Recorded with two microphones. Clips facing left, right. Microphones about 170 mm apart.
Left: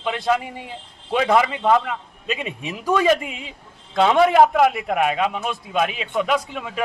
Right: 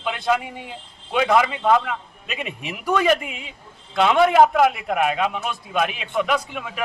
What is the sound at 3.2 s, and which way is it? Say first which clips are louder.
Speech: left 2 dB; 30° left (ahead or behind).